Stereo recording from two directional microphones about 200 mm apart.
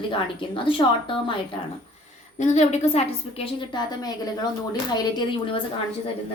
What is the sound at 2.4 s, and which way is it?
A woman's voice, 35° left (ahead or behind).